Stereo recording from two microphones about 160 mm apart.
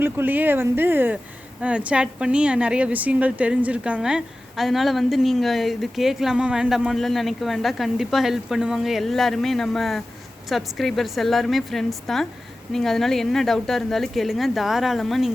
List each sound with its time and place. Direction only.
0.0 s a woman's voice: 10° right (ahead or behind)